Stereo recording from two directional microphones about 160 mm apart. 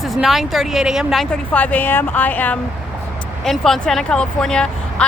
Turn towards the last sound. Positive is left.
turn(degrees=5)  # may be behind; listen again after turning